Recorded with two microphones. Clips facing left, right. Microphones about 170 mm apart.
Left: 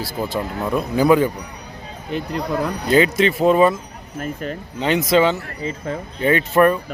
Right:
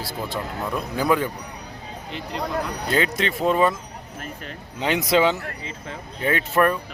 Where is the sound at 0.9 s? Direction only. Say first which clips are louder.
Left 7 dB; 5° left (ahead or behind).